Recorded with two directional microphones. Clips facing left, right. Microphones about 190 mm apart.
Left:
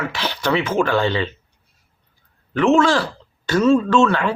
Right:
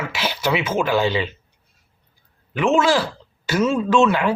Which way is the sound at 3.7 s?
15° right (ahead or behind).